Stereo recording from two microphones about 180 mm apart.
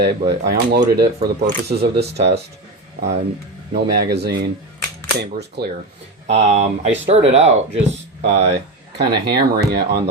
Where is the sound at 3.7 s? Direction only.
65° right (ahead or behind).